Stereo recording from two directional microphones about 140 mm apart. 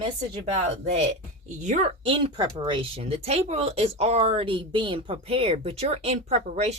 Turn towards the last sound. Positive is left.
turn(degrees=-55)  # may be behind; listen again after turning